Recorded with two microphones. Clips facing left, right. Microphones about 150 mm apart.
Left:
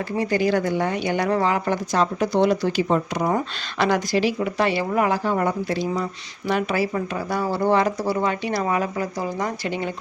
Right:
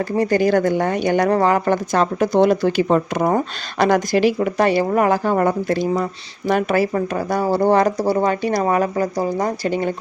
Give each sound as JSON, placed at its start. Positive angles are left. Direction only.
{"t": 0.2, "sound": "a woman's voice", "side_deg": -45}